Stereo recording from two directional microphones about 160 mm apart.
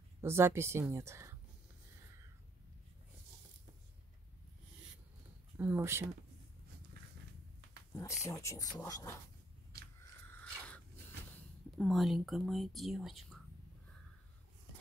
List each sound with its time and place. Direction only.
0.2 s speech: 15° right (ahead or behind)
5.6 s speech: 10° right (ahead or behind)
8.2 s speech: 20° left (ahead or behind)
9.7 s biting: 80° right
10.3 s a sound: 10° left (ahead or behind)
11.3 s speech: 5° left (ahead or behind)